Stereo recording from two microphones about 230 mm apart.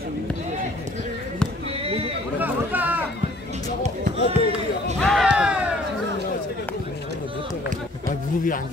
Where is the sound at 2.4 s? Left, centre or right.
Centre.